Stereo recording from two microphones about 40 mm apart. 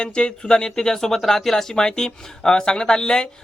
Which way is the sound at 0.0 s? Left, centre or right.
Left.